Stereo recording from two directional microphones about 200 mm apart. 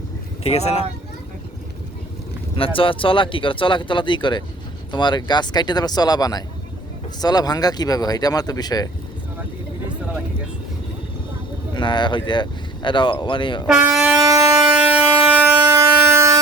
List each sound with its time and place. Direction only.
0.4 s speech: 30° left (ahead or behind)
2.6 s speech: 25° left (ahead or behind)
11.7 s speech: 25° left (ahead or behind)
13.7 s speech: 5° right (ahead or behind)
14.7 s air horn: 5° right (ahead or behind)